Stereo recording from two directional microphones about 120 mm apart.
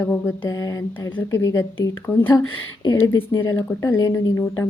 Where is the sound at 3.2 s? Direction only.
25° left (ahead or behind).